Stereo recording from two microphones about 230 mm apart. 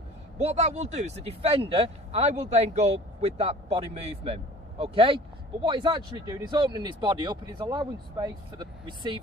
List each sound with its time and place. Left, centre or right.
0.4 s speech: right